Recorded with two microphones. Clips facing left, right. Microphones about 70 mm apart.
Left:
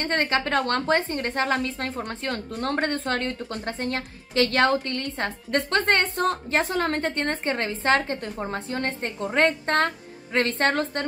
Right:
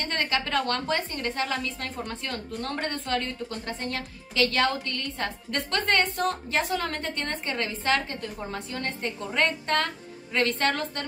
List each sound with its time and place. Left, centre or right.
0.0 s a woman's voice: left